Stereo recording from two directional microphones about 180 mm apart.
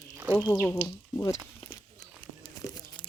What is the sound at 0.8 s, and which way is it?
Speech, 20° left (ahead or behind).